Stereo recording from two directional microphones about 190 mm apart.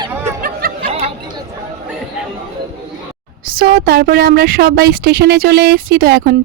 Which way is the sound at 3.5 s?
50° right (ahead or behind).